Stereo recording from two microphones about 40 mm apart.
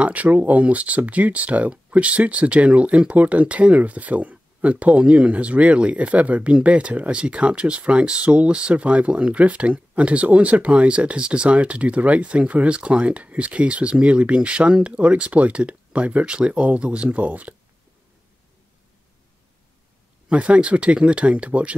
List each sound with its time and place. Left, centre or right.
0.0 s speech: right
20.2 s speech: right